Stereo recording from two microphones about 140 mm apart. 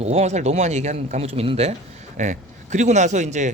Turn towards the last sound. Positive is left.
turn(degrees=-60)  # may be behind; listen again after turning